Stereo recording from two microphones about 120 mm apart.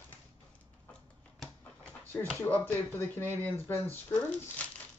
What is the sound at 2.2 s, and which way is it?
Speech, 15° left (ahead or behind).